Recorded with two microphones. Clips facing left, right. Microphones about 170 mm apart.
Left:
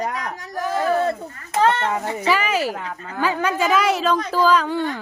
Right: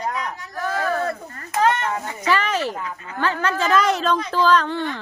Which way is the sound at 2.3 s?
10° left (ahead or behind).